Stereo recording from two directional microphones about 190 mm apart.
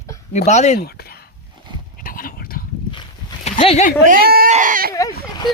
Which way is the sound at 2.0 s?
50° left (ahead or behind).